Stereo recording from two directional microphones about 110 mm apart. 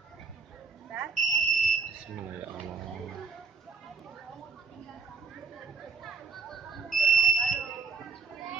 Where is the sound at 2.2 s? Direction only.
15° right (ahead or behind).